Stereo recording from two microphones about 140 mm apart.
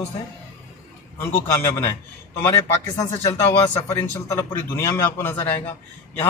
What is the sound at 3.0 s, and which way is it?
A man's voice, 20° left (ahead or behind).